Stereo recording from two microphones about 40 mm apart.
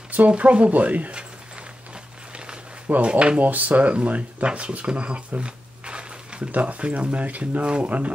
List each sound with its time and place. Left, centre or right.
0.3 s speech: right
2.3 s a sound: right
2.9 s speech: right
3.4 s speech: right
4.5 s a sound: right
6.5 s speech: right